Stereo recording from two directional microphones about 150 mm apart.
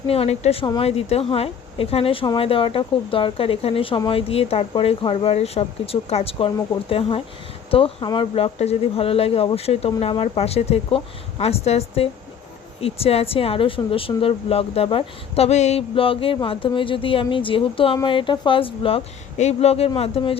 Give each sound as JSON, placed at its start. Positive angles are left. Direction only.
{"t": 0.1, "sound": "speech", "side_deg": 45}
{"t": 7.7, "sound": "speech", "side_deg": 40}